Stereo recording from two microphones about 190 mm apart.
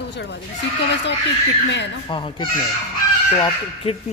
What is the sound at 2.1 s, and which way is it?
Speech, 25° left (ahead or behind).